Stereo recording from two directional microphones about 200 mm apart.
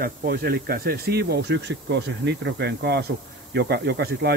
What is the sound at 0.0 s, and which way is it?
Speech, 50° right (ahead or behind).